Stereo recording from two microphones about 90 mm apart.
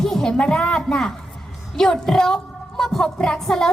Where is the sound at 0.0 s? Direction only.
5° left (ahead or behind).